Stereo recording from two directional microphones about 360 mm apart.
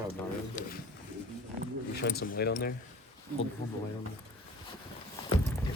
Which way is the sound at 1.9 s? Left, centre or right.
Left.